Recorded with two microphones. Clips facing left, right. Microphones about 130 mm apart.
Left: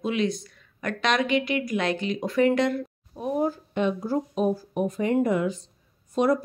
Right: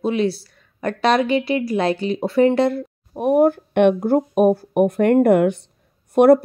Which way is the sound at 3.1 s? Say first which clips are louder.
Right 11 dB; 65° right (ahead or behind).